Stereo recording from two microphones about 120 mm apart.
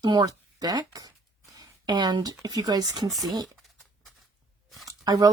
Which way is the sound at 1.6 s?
35° right (ahead or behind).